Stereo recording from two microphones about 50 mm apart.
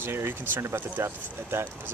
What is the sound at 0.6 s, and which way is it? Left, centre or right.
Speech, right.